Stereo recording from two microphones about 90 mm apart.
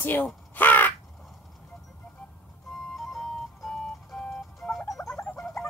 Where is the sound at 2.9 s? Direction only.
5° left (ahead or behind).